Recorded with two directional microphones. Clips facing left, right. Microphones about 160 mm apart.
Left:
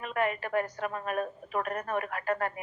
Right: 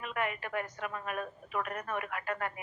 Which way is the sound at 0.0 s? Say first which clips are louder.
Left 5 dB; 40° left (ahead or behind).